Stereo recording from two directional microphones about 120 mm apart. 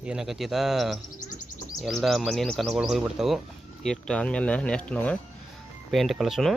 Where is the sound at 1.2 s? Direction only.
90° left.